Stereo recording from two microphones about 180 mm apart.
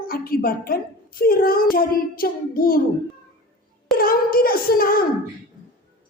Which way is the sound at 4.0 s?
55° left (ahead or behind).